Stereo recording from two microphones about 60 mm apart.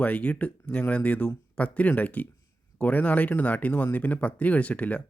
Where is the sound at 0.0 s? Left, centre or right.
Left.